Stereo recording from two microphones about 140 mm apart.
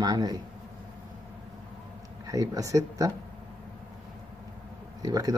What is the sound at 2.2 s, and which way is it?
Speech, 25° right (ahead or behind).